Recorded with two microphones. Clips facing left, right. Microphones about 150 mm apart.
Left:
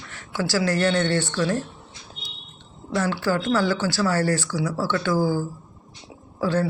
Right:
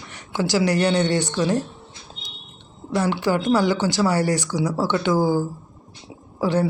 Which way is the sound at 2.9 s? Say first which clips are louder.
Right 2 dB; 15° right (ahead or behind).